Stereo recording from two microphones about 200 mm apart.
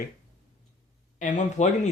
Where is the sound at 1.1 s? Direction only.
40° left (ahead or behind).